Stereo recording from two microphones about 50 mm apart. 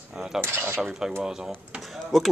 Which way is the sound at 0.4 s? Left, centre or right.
Right.